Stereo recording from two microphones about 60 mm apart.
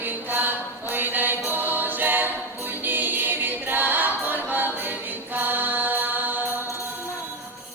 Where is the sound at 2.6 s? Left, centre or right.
Right.